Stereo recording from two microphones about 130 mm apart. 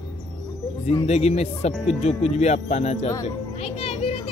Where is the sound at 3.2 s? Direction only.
50° left (ahead or behind).